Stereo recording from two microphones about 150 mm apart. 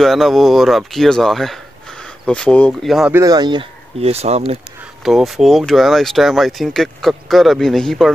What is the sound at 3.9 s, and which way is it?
Speech, 45° right (ahead or behind).